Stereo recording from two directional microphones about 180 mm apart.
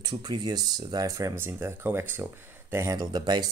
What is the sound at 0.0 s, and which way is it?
Speech, 25° right (ahead or behind).